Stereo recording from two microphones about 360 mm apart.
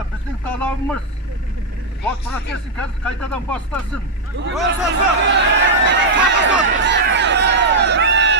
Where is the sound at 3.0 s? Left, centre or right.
Centre.